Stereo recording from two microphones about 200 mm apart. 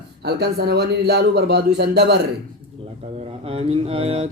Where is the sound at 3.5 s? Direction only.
30° right (ahead or behind).